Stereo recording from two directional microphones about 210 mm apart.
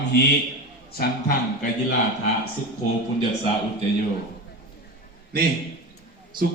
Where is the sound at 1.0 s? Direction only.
45° left (ahead or behind).